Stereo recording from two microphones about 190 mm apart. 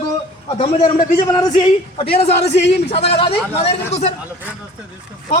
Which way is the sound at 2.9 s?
30° left (ahead or behind).